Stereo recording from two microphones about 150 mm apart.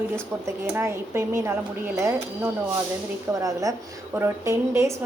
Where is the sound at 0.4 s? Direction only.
15° right (ahead or behind).